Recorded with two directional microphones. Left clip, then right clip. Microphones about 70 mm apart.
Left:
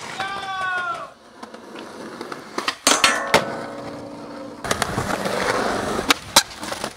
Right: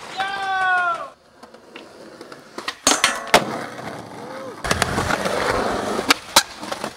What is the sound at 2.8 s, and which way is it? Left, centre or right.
Hammer, centre.